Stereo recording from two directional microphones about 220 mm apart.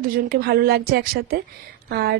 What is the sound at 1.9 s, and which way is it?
Speech, 45° right (ahead or behind).